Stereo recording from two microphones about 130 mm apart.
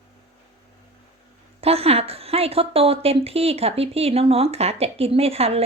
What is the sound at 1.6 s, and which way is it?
A woman's voice, 50° right (ahead or behind).